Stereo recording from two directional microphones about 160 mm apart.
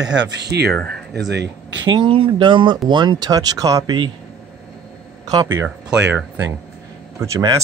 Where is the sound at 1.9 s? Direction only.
30° right (ahead or behind).